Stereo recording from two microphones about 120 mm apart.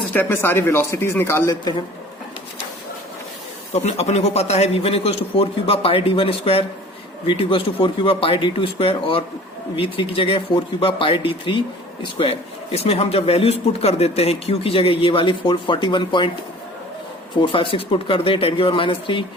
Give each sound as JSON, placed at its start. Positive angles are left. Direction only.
{"t": 0.1, "sound": "speech", "side_deg": 15}
{"t": 3.7, "sound": "a man's voice", "side_deg": 65}
{"t": 12.7, "sound": "speech", "side_deg": 55}
{"t": 17.4, "sound": "speech", "side_deg": 45}